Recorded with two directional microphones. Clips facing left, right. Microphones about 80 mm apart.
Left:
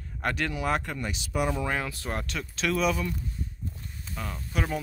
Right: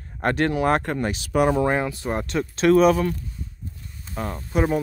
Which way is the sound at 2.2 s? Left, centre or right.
Right.